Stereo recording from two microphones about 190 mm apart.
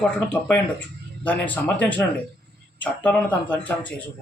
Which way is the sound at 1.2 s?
10° left (ahead or behind).